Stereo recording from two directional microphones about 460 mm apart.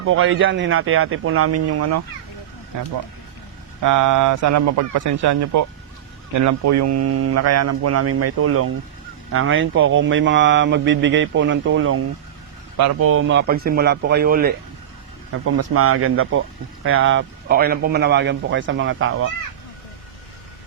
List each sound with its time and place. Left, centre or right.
0.0 s speech: right
3.8 s speech: right; by 14.5 s centre
15.3 s speech: right